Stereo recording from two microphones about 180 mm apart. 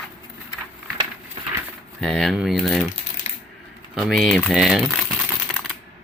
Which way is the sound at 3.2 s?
35° left (ahead or behind).